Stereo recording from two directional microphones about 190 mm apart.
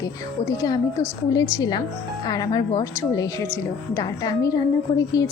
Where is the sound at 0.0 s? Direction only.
20° left (ahead or behind).